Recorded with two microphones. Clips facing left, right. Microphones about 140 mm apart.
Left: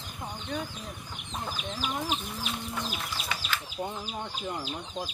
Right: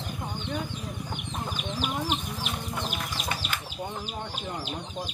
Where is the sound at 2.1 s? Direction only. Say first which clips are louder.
Right 2 dB; 60° right (ahead or behind).